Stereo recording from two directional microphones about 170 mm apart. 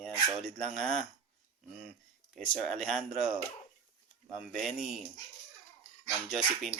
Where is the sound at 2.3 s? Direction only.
5° left (ahead or behind).